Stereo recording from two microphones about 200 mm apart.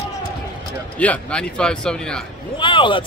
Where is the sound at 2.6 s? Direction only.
25° left (ahead or behind).